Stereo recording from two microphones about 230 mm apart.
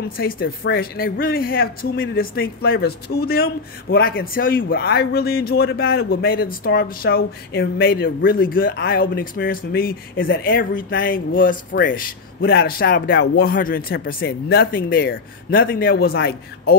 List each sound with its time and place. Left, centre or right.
0.2 s a man's voice: left